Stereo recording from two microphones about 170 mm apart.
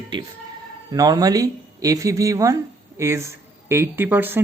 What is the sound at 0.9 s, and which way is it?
A woman's voice, 20° right (ahead or behind).